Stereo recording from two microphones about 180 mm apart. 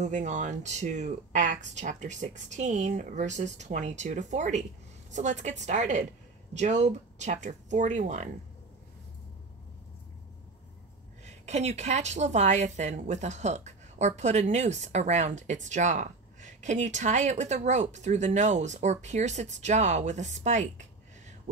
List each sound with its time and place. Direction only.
0.0 s a woman's voice: 40° right (ahead or behind)
11.2 s a woman's voice: 40° right (ahead or behind)